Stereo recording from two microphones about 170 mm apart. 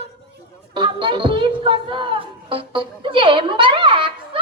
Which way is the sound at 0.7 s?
30° right (ahead or behind).